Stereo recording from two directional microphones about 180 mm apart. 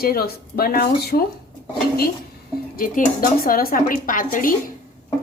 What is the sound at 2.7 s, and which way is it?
Speech, 50° left (ahead or behind).